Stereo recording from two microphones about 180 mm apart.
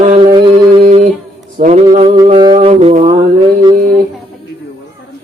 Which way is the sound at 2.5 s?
40° right (ahead or behind).